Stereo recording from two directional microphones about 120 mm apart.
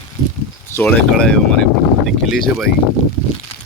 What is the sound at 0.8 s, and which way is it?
Speech, 10° left (ahead or behind).